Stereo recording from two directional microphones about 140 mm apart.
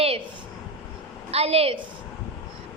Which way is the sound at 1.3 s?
45° right (ahead or behind).